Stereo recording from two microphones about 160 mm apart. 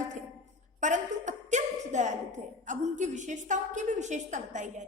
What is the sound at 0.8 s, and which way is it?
A woman's voice, 50° right (ahead or behind).